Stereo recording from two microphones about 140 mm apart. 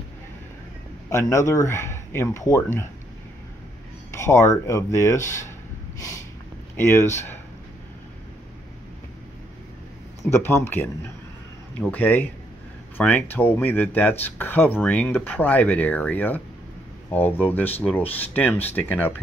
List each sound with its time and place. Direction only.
1.1 s speech: 20° left (ahead or behind)
4.1 s speech: 20° left (ahead or behind)
6.8 s speech: 15° left (ahead or behind)
10.3 s speech: 15° left (ahead or behind)